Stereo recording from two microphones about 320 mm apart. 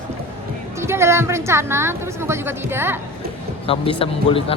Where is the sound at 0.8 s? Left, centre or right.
Centre.